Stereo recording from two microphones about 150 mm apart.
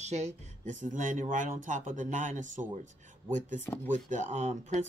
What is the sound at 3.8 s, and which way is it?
Speech, 50° right (ahead or behind).